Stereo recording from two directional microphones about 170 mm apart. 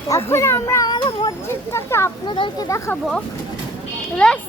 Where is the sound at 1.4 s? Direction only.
15° left (ahead or behind).